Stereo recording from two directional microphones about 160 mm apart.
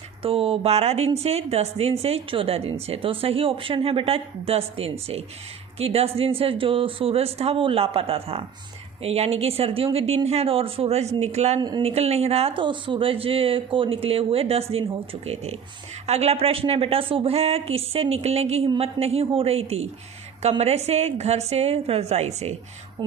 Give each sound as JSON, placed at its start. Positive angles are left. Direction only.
{"t": 0.2, "sound": "speech", "side_deg": -35}